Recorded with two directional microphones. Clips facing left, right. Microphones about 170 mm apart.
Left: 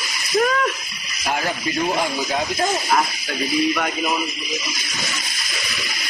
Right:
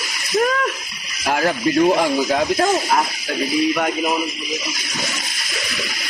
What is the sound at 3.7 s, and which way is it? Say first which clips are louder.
Speech: right 3 dB; 15° right (ahead or behind).